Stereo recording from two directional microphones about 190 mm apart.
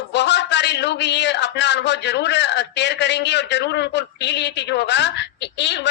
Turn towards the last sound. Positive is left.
turn(degrees=65)  # may be behind; listen again after turning